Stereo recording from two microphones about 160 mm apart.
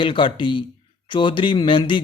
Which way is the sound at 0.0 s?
30° left (ahead or behind).